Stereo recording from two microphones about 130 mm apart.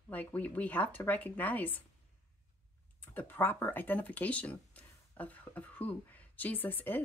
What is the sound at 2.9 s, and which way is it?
Speech, 15° left (ahead or behind).